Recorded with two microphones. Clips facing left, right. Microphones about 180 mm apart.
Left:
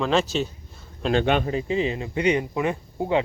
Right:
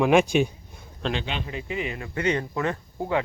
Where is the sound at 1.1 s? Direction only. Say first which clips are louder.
Left 13 dB; 55° left (ahead or behind).